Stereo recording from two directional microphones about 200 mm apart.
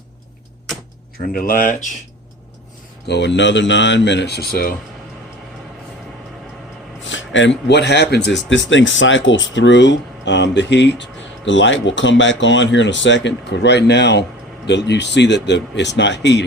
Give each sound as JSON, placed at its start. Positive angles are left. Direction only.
{"t": 1.3, "sound": "speech", "side_deg": 45}
{"t": 3.1, "sound": "speech", "side_deg": 60}
{"t": 7.1, "sound": "speech", "side_deg": 70}